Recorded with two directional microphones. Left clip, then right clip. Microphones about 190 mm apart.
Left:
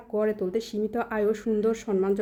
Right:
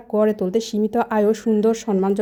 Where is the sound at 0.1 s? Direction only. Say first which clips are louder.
Right 7 dB; 30° right (ahead or behind).